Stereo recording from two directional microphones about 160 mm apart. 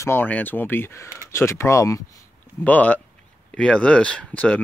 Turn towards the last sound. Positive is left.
turn(degrees=10)  # may be behind; listen again after turning